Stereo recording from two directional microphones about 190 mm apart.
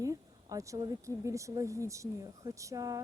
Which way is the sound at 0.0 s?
15° right (ahead or behind).